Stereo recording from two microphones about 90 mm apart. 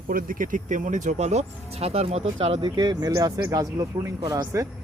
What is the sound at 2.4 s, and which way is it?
Speech, 60° right (ahead or behind).